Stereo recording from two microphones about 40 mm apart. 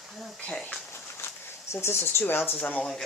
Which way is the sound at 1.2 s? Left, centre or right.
Left.